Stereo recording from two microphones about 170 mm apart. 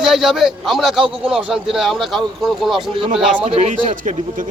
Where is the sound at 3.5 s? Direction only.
35° right (ahead or behind).